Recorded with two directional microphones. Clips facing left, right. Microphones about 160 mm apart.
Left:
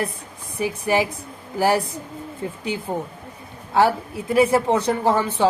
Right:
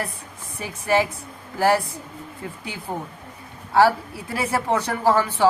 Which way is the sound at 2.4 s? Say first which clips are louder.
Left 5 dB; 25° left (ahead or behind).